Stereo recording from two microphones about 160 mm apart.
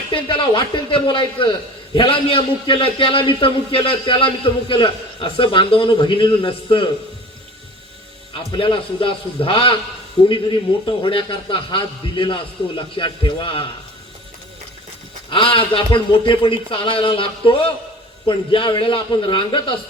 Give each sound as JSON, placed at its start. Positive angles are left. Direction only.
{"t": 0.1, "sound": "a man's voice", "side_deg": 30}
{"t": 8.3, "sound": "a man's voice", "side_deg": 35}
{"t": 15.3, "sound": "a man's voice", "side_deg": 35}